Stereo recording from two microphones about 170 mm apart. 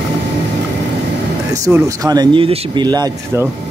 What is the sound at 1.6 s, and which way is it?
Speech, 20° right (ahead or behind).